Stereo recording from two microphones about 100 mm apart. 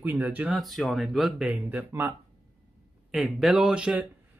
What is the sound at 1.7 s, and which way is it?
Speech, 20° right (ahead or behind).